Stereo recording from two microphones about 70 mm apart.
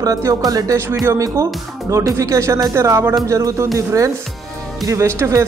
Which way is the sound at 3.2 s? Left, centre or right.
Right.